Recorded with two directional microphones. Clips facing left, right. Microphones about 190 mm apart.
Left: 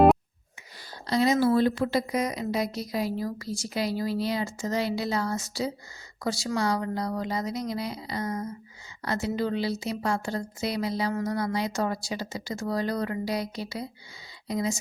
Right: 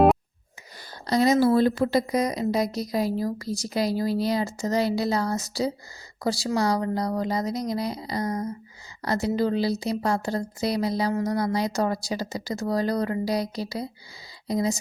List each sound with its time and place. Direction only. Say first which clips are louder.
1.0 s a woman's voice: right 3 dB; 40° right (ahead or behind)